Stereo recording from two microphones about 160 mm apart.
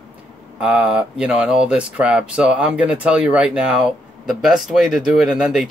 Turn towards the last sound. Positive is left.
turn(degrees=-5)  # may be behind; listen again after turning